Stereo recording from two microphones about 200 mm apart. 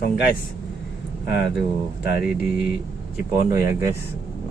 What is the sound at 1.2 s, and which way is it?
Speech, 55° left (ahead or behind).